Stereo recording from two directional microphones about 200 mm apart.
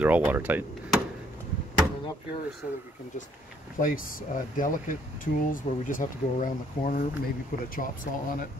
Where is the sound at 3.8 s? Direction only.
45° left (ahead or behind).